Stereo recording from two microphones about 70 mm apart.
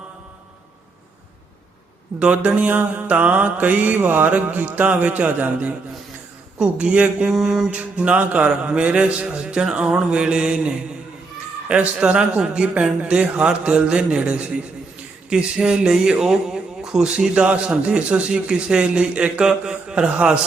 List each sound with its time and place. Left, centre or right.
2.1 s mantra: centre
6.6 s speech: centre
7.3 s speech: centre